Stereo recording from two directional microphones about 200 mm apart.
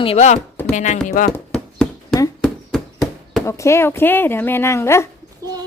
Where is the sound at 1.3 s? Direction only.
5° left (ahead or behind).